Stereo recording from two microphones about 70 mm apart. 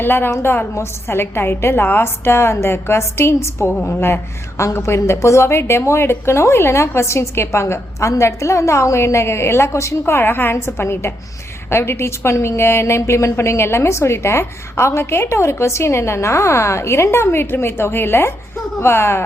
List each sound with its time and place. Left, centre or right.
0.0 s a woman's voice: left